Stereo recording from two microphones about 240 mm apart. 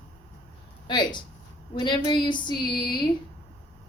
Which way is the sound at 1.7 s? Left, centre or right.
Centre.